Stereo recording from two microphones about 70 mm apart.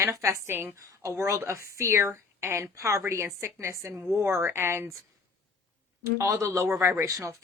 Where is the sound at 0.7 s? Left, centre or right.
Right.